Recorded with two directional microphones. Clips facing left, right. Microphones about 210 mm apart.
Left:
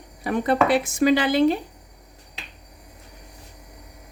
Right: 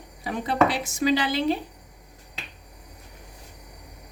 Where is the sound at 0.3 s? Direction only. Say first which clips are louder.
Left 3 dB; 55° left (ahead or behind).